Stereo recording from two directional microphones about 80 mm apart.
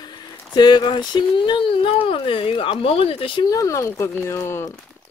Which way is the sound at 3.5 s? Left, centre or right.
Left.